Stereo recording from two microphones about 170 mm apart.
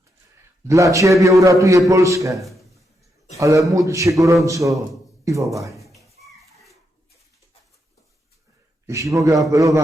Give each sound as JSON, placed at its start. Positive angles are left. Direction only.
{"t": 0.7, "sound": "a man's voice", "side_deg": -20}
{"t": 5.8, "sound": "children playing", "side_deg": 0}
{"t": 8.9, "sound": "a man's voice", "side_deg": -20}